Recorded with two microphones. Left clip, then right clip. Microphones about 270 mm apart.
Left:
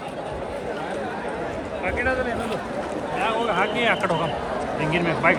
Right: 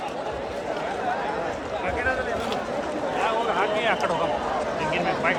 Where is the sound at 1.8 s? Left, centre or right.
Left.